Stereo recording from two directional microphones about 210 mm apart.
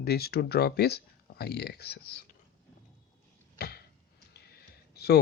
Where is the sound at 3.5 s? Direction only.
45° left (ahead or behind).